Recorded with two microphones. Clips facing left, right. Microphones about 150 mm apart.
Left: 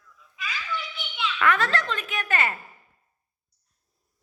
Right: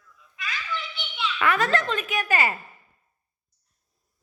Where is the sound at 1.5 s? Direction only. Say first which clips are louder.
Right 3 dB; 15° right (ahead or behind).